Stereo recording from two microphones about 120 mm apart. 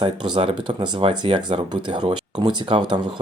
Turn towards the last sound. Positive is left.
turn(degrees=-35)  # may be behind; listen again after turning